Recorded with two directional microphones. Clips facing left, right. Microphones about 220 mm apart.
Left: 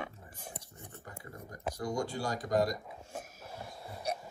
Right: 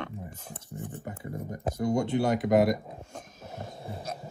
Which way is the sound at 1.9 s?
25° right (ahead or behind).